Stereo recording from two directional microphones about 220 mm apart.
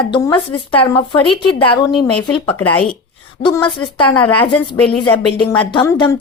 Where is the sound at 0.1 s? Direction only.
20° left (ahead or behind).